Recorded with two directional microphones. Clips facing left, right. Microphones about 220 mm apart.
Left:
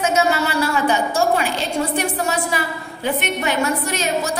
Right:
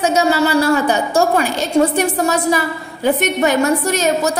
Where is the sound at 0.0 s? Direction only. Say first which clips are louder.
Right 4 dB; 35° right (ahead or behind).